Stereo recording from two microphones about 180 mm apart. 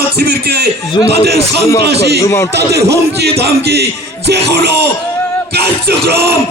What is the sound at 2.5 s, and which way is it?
A man's voice, 65° right (ahead or behind).